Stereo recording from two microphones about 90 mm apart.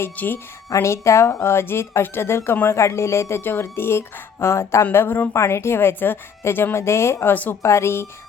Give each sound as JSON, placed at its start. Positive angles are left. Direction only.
{"t": 0.0, "sound": "speech", "side_deg": 20}
{"t": 0.7, "sound": "speech", "side_deg": 35}